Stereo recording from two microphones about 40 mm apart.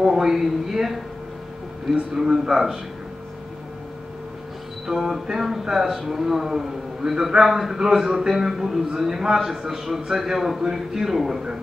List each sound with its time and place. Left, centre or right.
0.0 s speech: centre
2.1 s speech: centre
4.8 s speech: centre